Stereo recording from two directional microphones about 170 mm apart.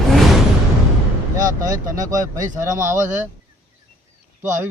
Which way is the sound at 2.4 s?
50° right (ahead or behind).